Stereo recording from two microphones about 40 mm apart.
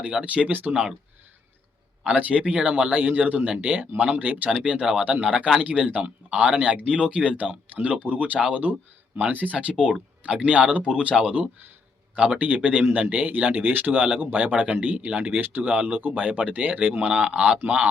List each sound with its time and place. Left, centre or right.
0.4 s speech: right
2.0 s speech: right
4.4 s speech: right
9.7 s speech: right